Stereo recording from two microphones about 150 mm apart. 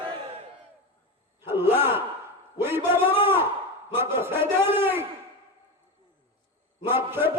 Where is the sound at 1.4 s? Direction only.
15° right (ahead or behind).